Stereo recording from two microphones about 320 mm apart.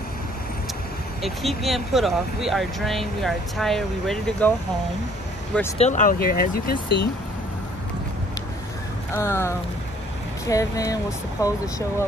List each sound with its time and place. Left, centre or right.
1.2 s speech: centre
5.8 s speech: left
9.1 s speech: centre